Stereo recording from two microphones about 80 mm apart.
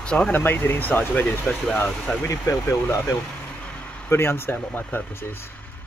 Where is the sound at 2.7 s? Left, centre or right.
Left.